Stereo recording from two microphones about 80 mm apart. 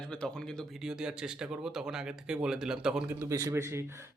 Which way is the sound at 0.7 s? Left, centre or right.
Centre.